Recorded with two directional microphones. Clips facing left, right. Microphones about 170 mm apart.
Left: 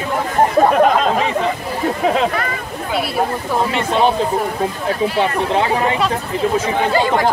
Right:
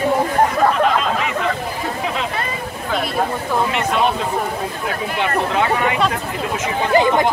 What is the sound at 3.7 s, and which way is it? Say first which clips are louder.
Speech: left 3 dB; 30° left (ahead or behind).